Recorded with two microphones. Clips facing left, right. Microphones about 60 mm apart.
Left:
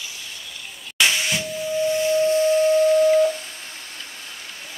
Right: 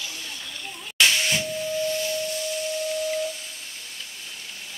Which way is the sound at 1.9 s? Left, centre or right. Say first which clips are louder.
Left 9 dB; left.